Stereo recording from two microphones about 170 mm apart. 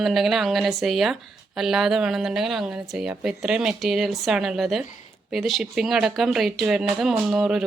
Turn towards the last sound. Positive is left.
turn(degrees=-5)  # may be behind; listen again after turning